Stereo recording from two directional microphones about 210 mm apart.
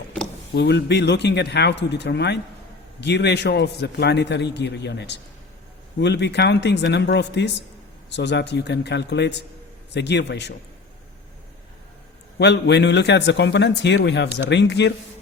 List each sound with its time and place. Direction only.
0.5 s a man's voice: 55° left (ahead or behind)
12.4 s a man's voice: 55° left (ahead or behind)